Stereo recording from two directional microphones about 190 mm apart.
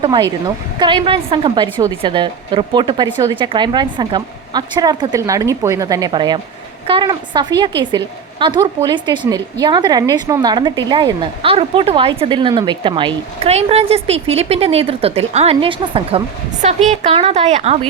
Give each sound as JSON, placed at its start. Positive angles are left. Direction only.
{"t": 0.0, "sound": "a woman's voice", "side_deg": -25}